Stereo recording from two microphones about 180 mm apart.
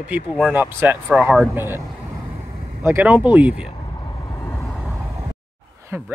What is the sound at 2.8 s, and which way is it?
Speech, 10° right (ahead or behind).